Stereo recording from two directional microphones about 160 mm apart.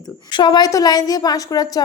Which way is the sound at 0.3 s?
30° left (ahead or behind).